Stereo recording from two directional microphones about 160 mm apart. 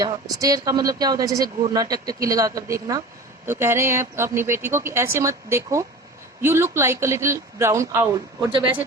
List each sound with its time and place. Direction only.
0.0 s speech: 25° right (ahead or behind)